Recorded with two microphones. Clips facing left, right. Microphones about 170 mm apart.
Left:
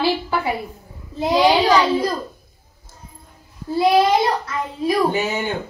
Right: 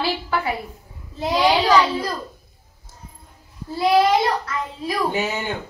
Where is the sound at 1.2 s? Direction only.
20° left (ahead or behind).